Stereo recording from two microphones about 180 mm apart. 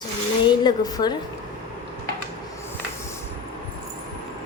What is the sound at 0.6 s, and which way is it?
Speech, 20° left (ahead or behind).